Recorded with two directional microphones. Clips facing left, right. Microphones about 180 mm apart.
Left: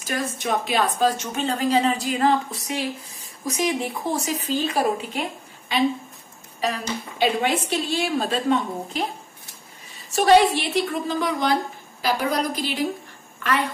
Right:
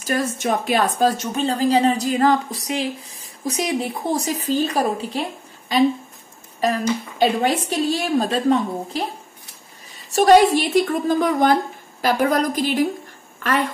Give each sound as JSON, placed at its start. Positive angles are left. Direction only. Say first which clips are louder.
{"t": 0.0, "sound": "a woman's voice", "louder": "right 5 dB", "side_deg": -45}
{"t": 10.1, "sound": "a woman's voice", "louder": "right 3 dB", "side_deg": -45}